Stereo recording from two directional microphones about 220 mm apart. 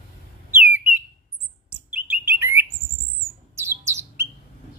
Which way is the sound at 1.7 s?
5° right (ahead or behind).